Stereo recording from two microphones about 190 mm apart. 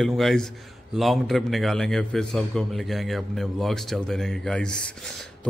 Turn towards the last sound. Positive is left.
turn(degrees=5)  # may be behind; listen again after turning